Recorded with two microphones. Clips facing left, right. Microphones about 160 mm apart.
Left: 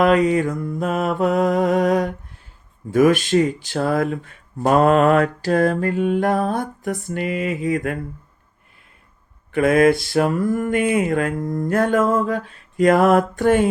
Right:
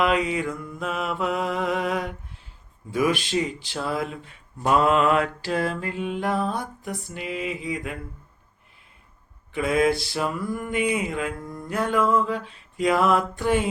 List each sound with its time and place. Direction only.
0.0 s speech: 45° left (ahead or behind)
9.5 s speech: 55° left (ahead or behind)